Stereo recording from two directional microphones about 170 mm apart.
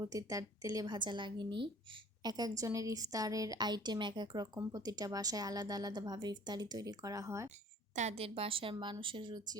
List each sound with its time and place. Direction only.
0.0 s a woman's voice: 20° right (ahead or behind)
7.9 s a woman's voice: 40° right (ahead or behind)